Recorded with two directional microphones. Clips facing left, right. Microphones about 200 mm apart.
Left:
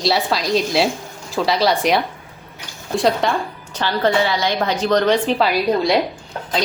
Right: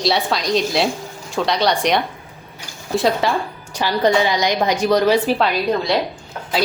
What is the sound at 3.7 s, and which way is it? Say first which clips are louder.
A woman's voice: right 1 dB; 15° right (ahead or behind).